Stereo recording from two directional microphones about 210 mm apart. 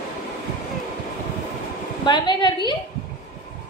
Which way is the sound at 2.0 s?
20° left (ahead or behind).